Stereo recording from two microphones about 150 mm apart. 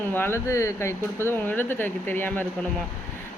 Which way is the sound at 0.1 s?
15° left (ahead or behind).